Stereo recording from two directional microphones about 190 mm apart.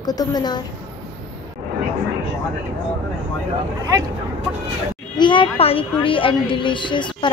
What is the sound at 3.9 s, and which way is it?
Speech, 20° right (ahead or behind).